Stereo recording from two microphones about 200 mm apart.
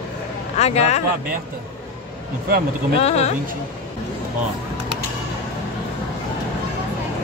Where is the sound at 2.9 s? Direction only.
30° left (ahead or behind).